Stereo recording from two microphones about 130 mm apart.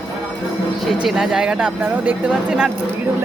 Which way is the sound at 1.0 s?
5° right (ahead or behind).